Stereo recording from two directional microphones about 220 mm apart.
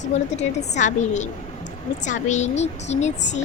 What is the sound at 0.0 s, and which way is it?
A woman's voice, 30° left (ahead or behind).